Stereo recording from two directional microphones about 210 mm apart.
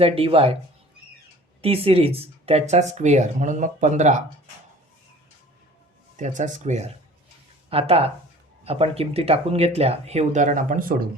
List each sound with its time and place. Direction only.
0.0 s speech: 25° right (ahead or behind)
1.6 s speech: 25° right (ahead or behind)
6.1 s speech: 35° right (ahead or behind)